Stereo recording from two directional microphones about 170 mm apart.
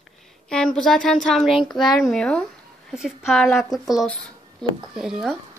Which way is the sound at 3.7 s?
20° left (ahead or behind).